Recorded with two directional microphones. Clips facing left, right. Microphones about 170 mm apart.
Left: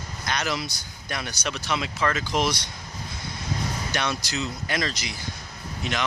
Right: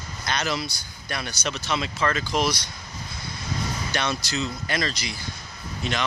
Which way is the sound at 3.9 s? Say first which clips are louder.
Right 2 dB; 15° left (ahead or behind).